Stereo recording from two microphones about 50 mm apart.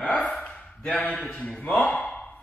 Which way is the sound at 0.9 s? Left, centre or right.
Left.